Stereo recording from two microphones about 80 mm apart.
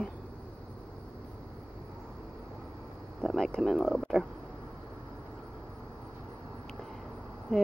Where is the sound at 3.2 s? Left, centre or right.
Centre.